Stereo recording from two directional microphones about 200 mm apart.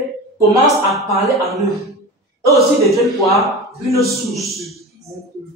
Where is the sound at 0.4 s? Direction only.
15° right (ahead or behind).